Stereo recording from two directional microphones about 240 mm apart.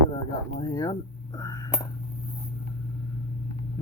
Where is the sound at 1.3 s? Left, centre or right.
Centre.